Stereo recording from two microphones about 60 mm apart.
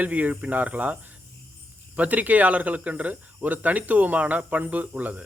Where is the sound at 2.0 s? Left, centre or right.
Right.